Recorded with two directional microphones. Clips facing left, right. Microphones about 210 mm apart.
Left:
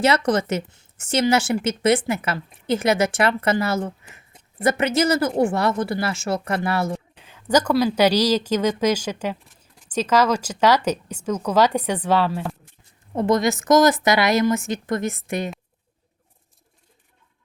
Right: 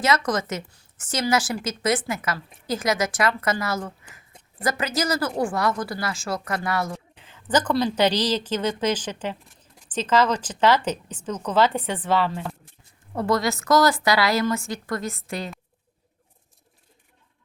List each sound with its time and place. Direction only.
0.0 s a woman's voice: 30° left (ahead or behind)
7.2 s a woman's voice: 10° left (ahead or behind)